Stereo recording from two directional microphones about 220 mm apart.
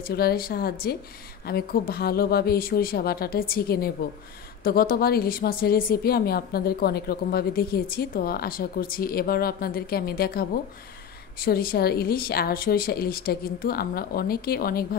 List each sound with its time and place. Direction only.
0.0 s a woman's voice: 45° left (ahead or behind)